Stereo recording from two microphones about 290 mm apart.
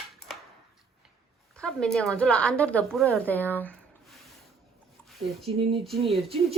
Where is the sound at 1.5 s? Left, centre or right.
Centre.